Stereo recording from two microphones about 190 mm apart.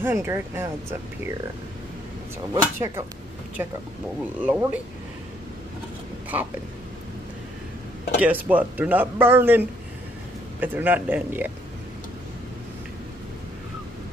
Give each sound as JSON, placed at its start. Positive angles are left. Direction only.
{"t": 0.0, "sound": "speech", "side_deg": -15}
{"t": 2.5, "sound": "speech", "side_deg": -15}
{"t": 8.2, "sound": "speech", "side_deg": -10}